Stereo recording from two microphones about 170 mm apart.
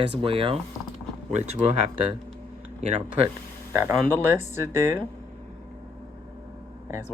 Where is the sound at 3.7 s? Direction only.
15° right (ahead or behind).